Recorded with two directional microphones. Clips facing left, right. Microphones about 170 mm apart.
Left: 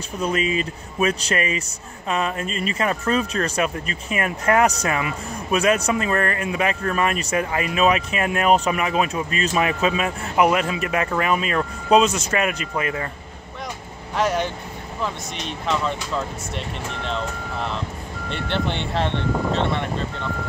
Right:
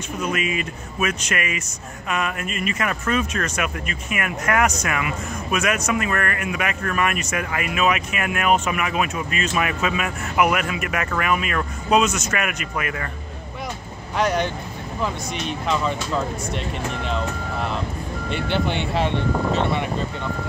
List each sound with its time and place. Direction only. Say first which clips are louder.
0.2 s speech: left 3 dB; 30° left (ahead or behind)
14.1 s speech: even; centre (ahead or behind)